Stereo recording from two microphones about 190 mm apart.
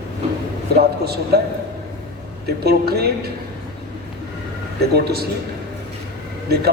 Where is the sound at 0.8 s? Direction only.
55° right (ahead or behind).